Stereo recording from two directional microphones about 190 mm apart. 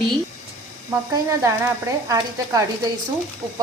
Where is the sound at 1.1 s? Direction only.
15° right (ahead or behind).